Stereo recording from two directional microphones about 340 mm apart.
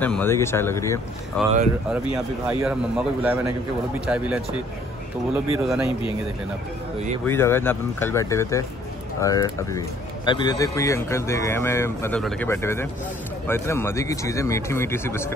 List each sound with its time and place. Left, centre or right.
0.0 s speech: centre
5.5 s speech: centre
7.2 s speech: centre